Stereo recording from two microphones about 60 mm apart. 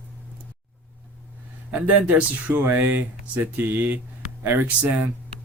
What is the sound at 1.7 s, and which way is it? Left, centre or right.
Speech, right.